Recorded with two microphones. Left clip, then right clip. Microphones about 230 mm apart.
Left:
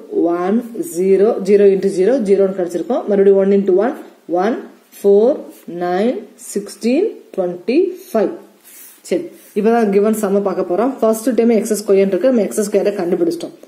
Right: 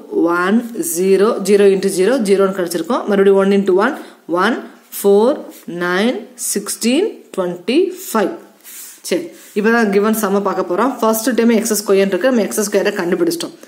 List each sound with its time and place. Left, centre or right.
0.3 s speech: centre